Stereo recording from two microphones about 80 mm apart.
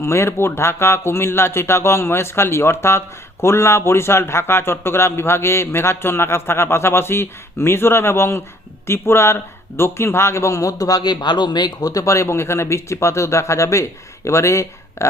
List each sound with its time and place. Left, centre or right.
0.0 s a man's voice: left